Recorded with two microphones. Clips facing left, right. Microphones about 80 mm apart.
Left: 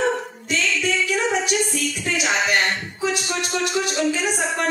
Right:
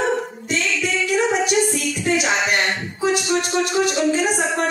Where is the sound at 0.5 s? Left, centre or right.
Right.